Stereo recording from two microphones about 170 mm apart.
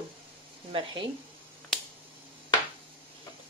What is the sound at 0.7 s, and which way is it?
Speech, 30° right (ahead or behind).